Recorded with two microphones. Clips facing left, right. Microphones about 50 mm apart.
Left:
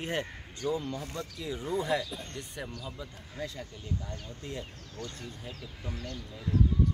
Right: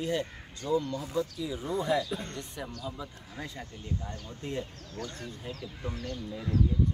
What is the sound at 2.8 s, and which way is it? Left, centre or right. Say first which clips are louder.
Speech: right 3 dB; centre.